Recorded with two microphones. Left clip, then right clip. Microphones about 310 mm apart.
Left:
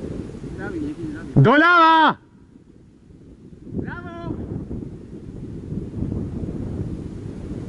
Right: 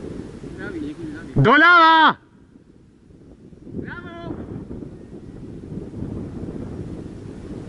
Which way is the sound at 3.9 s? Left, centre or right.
Left.